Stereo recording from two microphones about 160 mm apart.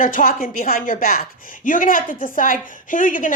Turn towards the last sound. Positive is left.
turn(degrees=55)  # may be behind; listen again after turning